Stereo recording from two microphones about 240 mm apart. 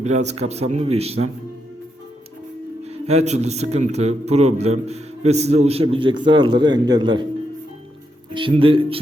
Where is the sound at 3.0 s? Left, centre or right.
Right.